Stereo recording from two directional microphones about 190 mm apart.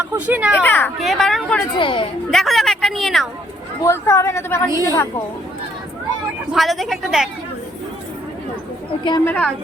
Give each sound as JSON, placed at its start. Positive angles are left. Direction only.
{"t": 0.1, "sound": "speech", "side_deg": -10}
{"t": 0.6, "sound": "a woman's voice", "side_deg": 10}
{"t": 1.8, "sound": "a woman's voice", "side_deg": 25}
{"t": 2.3, "sound": "speech", "side_deg": 0}
{"t": 3.8, "sound": "a woman's voice", "side_deg": 15}
{"t": 4.7, "sound": "a woman's voice", "side_deg": -15}
{"t": 6.5, "sound": "a woman's voice", "side_deg": 0}
{"t": 9.2, "sound": "a woman's voice", "side_deg": 10}